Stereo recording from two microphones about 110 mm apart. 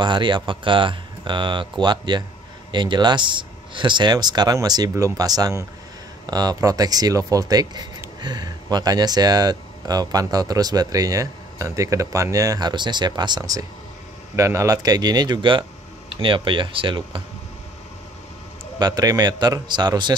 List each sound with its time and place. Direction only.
0.0 s speech: 45° right (ahead or behind)
14.3 s speech: 30° right (ahead or behind); by 17.2 s 50° right (ahead or behind)
18.8 s speech: 40° right (ahead or behind)